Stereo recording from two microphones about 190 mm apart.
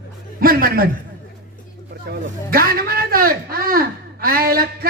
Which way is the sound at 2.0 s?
50° right (ahead or behind).